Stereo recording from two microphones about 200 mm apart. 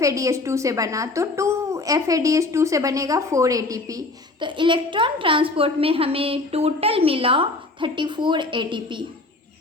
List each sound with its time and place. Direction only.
0.0 s a woman's voice: 15° right (ahead or behind)